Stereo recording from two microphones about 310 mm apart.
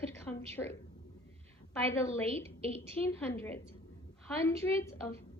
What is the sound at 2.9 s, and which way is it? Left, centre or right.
A woman's voice, centre.